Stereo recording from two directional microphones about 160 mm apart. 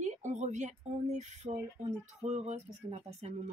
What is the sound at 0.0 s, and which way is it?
Speech, 50° right (ahead or behind).